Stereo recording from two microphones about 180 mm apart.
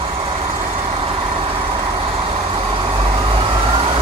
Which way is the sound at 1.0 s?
30° right (ahead or behind).